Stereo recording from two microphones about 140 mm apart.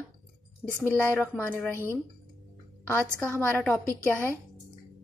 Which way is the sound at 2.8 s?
10° left (ahead or behind).